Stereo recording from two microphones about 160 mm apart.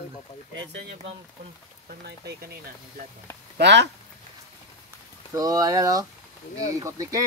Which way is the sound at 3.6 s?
90° right.